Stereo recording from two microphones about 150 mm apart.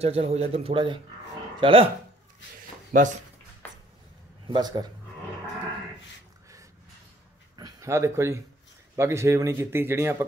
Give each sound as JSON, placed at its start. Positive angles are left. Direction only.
{"t": 0.0, "sound": "speech", "side_deg": -40}
{"t": 2.9, "sound": "speech", "side_deg": -60}
{"t": 4.5, "sound": "speech", "side_deg": -25}
{"t": 7.5, "sound": "a sound", "side_deg": -25}
{"t": 8.9, "sound": "a man's voice", "side_deg": -20}